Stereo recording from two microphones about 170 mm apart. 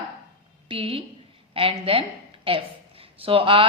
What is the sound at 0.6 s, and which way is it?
A woman's voice, 35° right (ahead or behind).